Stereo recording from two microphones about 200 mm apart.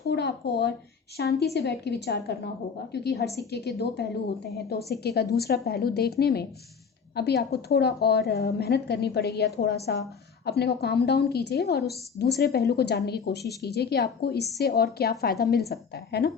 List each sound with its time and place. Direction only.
0.0 s a woman's voice: 55° left (ahead or behind)